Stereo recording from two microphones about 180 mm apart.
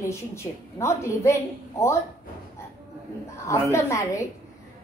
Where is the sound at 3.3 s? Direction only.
15° left (ahead or behind).